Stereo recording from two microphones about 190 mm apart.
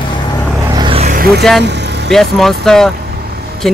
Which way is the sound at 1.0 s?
50° right (ahead or behind).